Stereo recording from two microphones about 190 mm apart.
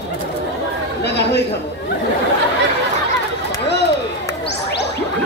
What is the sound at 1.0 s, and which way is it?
Speech, 60° left (ahead or behind).